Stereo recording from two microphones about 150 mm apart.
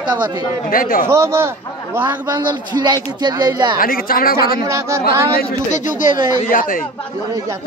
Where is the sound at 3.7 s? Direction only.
70° left (ahead or behind).